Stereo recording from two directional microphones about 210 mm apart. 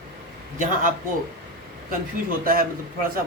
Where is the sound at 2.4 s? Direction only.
45° right (ahead or behind).